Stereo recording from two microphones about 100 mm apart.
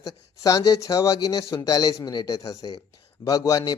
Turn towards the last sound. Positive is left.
turn(degrees=35)  # may be behind; listen again after turning